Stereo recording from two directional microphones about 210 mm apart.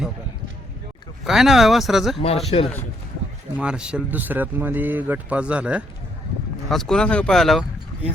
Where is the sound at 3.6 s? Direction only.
5° right (ahead or behind).